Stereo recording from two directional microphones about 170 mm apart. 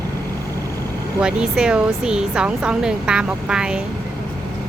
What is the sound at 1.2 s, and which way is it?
Speech, 5° right (ahead or behind).